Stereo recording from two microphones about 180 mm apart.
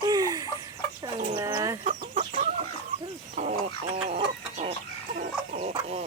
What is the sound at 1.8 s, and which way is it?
Chicken, 45° right (ahead or behind).